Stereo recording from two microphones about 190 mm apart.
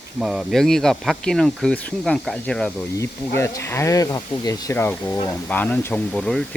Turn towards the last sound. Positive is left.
turn(degrees=5)  # may be behind; listen again after turning